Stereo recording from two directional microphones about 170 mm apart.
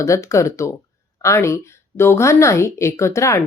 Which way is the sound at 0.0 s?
20° left (ahead or behind).